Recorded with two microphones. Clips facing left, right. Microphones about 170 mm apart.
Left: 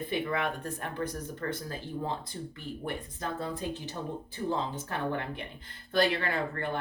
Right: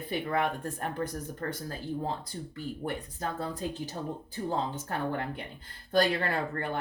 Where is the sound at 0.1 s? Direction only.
40° right (ahead or behind).